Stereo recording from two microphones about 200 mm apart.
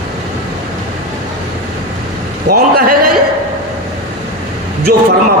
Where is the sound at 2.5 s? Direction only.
45° right (ahead or behind).